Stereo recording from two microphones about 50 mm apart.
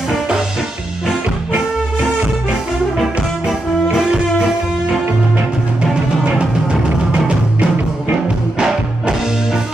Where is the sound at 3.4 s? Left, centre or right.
Centre.